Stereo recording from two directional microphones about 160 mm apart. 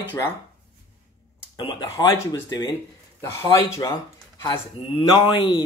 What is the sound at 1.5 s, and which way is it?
Speech, 25° left (ahead or behind).